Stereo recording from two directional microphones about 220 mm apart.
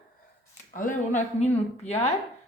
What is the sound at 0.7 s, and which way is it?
Speech, 35° left (ahead or behind).